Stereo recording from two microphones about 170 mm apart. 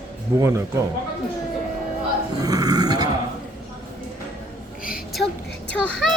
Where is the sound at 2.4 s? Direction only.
20° right (ahead or behind).